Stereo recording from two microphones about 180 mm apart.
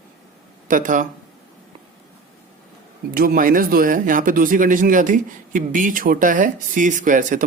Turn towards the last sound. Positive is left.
turn(degrees=-45)  # may be behind; listen again after turning